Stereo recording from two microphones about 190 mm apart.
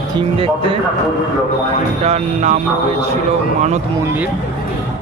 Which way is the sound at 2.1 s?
40° right (ahead or behind).